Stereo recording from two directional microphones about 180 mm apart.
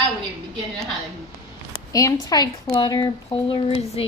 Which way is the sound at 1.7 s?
20° left (ahead or behind).